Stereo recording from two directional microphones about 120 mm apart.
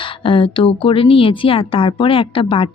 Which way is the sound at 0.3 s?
45° left (ahead or behind).